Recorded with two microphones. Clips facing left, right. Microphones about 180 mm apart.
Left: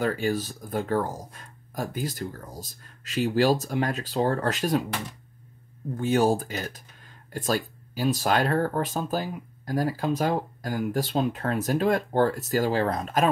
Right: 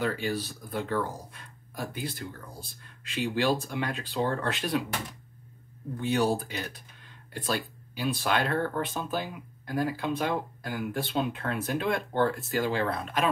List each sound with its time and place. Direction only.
0.0 s speech: 45° left (ahead or behind)
5.9 s speech: 45° left (ahead or behind)